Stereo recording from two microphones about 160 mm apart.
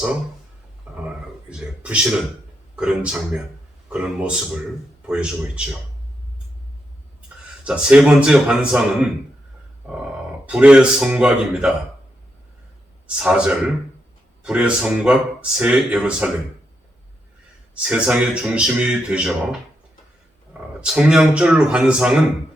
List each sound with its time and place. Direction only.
0.9 s a sound: 5° right (ahead or behind)
2.7 s speech: 5° right (ahead or behind)
7.6 s speech: 5° right (ahead or behind)
10.4 s speech: 5° right (ahead or behind)
13.1 s speech: 5° right (ahead or behind)
17.8 s speech: 5° right (ahead or behind)